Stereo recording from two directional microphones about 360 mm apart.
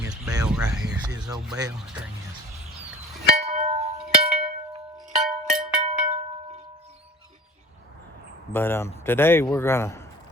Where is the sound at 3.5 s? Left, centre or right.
Centre.